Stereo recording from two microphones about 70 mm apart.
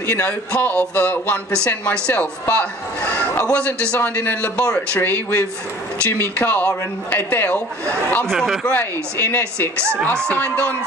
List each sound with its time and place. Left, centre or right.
0.0 s a man's voice: left
8.3 s speech: centre
8.6 s a man's voice: left